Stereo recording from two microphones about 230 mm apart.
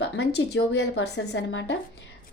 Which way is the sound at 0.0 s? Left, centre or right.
Left.